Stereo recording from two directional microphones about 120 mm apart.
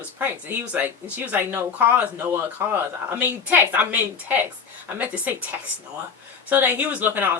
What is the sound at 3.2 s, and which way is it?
Speech, 15° right (ahead or behind).